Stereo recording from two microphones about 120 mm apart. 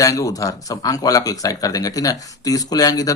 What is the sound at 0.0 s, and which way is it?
Speech, 30° left (ahead or behind).